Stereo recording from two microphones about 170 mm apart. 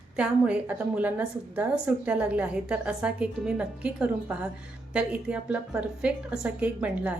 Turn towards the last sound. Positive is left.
turn(degrees=-10)  # may be behind; listen again after turning